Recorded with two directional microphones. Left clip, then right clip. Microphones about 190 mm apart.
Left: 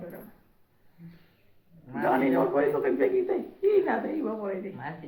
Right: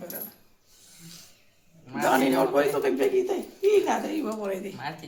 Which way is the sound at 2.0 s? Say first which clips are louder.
Right 2 dB; 20° right (ahead or behind).